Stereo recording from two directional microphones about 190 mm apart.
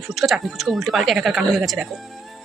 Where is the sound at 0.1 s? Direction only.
Centre (ahead or behind).